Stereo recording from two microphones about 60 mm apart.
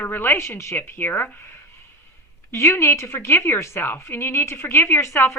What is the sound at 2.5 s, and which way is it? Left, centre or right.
A woman's voice, left.